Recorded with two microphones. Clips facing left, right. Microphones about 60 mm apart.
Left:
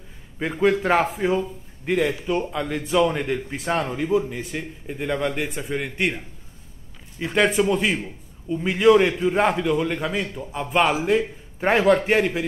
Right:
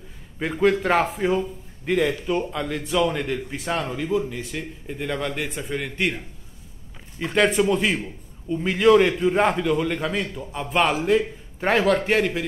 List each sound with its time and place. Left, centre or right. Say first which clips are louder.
0.4 s a man's voice: even; centre